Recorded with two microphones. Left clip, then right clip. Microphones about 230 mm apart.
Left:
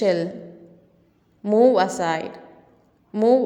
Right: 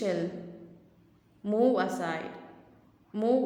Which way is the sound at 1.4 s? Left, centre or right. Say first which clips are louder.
Left 10 dB; left.